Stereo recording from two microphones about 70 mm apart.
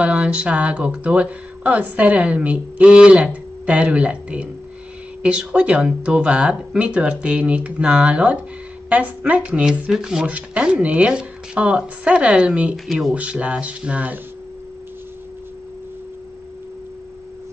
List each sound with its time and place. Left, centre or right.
0.0 s speech: centre
10.2 s speech: right
12.7 s speech: centre
13.1 s speech: centre